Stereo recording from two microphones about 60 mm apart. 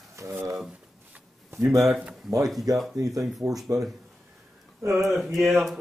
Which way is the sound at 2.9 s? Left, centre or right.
Right.